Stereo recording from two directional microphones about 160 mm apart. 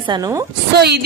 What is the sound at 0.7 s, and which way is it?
Speech, 90° right.